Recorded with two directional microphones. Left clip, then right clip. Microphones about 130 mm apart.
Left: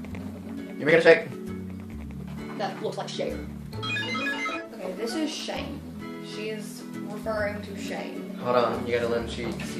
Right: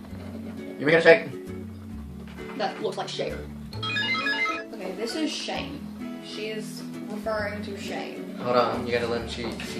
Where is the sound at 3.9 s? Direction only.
5° right (ahead or behind).